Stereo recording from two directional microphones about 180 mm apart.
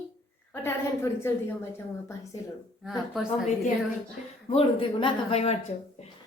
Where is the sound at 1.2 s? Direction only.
15° left (ahead or behind).